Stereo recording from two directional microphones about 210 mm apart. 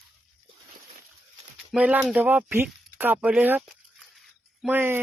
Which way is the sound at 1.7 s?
5° right (ahead or behind).